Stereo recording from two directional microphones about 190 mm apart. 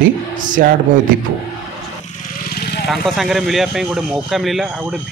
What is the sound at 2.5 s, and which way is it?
Vehicle, 55° left (ahead or behind).